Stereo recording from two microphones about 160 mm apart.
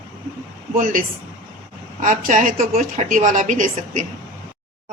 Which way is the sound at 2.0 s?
55° right (ahead or behind).